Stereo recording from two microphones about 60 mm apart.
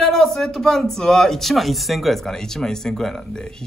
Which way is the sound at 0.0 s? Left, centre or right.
Centre.